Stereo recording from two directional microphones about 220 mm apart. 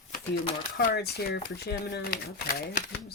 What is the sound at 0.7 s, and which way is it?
Speech, 45° left (ahead or behind).